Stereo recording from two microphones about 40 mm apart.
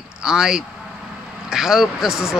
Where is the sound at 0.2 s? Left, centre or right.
Centre.